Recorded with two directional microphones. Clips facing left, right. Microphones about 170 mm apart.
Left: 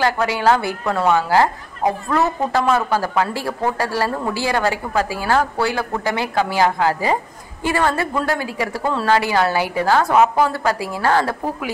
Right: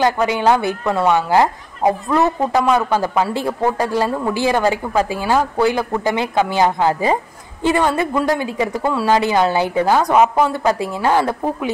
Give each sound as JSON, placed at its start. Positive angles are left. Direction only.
{"t": 0.0, "sound": "a woman's voice", "side_deg": -20}